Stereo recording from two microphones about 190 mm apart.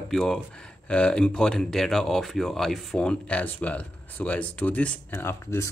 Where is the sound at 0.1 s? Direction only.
Centre (ahead or behind).